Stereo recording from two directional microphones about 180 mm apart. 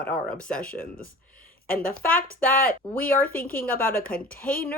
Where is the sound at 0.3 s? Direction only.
5° left (ahead or behind).